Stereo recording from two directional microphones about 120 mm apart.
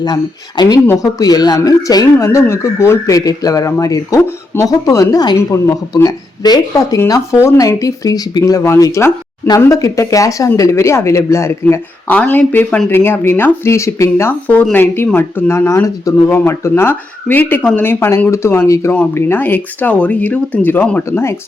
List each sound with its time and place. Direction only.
0.0 s speech: 35° left (ahead or behind)
12.0 s speech: 10° left (ahead or behind)
14.4 s speech: 10° left (ahead or behind)